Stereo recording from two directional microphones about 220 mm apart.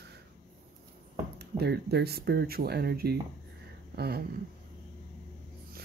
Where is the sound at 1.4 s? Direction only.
45° right (ahead or behind).